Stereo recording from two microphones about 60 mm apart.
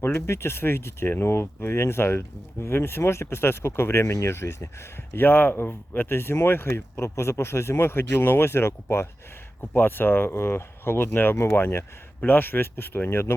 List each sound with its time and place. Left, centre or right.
0.0 s speech: left
9.7 s speech: left